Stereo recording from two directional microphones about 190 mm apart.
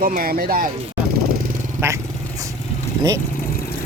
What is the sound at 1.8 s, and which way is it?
Speech, 10° right (ahead or behind).